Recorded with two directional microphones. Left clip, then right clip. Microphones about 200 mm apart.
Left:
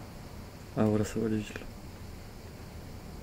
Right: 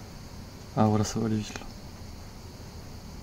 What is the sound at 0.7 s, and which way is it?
Speech, 70° right (ahead or behind).